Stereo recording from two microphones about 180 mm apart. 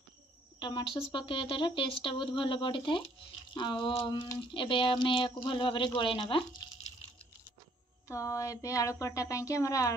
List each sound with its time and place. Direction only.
0.6 s speech: 25° left (ahead or behind)
8.1 s a woman's voice: 15° left (ahead or behind)